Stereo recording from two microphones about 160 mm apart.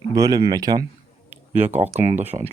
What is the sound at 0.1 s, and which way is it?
Speech, 20° right (ahead or behind).